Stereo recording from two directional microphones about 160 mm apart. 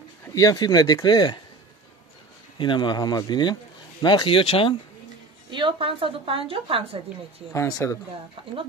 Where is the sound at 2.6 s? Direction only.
30° left (ahead or behind).